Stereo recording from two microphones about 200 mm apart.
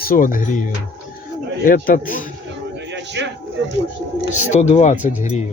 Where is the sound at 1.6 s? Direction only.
45° left (ahead or behind).